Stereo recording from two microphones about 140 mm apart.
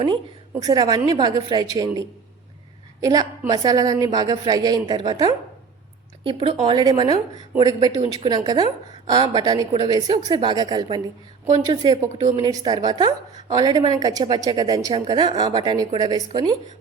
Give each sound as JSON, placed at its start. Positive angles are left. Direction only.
{"t": 0.6, "sound": "a woman's voice", "side_deg": -25}